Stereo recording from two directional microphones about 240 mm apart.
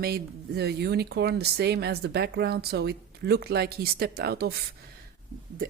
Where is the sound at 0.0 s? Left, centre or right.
Right.